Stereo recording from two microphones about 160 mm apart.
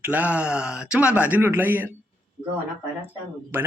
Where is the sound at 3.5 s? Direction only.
15° right (ahead or behind).